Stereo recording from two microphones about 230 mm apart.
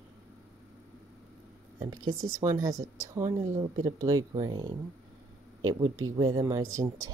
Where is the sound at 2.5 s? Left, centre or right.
Centre.